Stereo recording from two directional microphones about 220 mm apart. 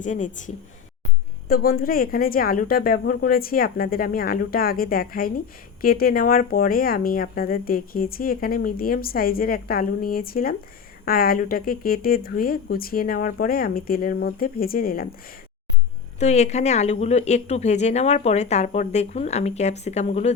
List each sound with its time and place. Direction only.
0.0 s speech: 35° left (ahead or behind)
16.2 s speech: 30° left (ahead or behind)